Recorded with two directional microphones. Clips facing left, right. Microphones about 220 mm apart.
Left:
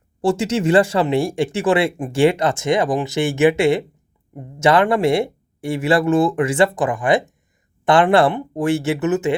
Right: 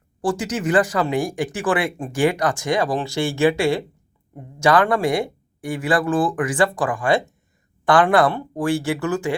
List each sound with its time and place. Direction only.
0.2 s speech: 25° left (ahead or behind)